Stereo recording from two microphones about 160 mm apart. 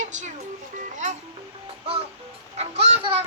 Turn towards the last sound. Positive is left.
turn(degrees=-40)  # may be behind; listen again after turning